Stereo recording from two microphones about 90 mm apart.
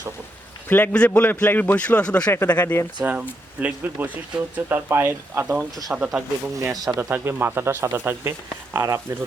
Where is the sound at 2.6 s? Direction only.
30° left (ahead or behind).